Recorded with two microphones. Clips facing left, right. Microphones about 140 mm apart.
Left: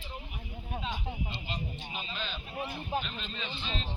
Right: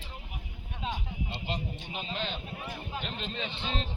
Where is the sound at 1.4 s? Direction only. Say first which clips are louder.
Right 3 dB; 70° right (ahead or behind).